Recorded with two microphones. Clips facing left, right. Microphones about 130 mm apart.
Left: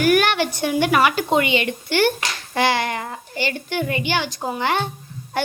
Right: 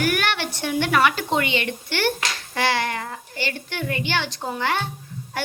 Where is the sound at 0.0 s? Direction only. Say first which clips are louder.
Left 7 dB; 15° left (ahead or behind).